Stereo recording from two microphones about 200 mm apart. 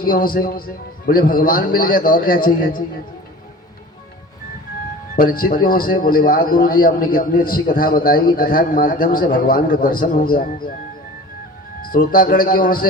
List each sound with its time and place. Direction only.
0.0 s a man's voice: 45° left (ahead or behind)
5.1 s a man's voice: 45° left (ahead or behind)
11.8 s a man's voice: 45° left (ahead or behind)